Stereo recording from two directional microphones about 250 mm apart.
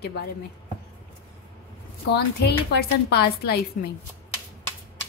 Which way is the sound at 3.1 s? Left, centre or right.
Left.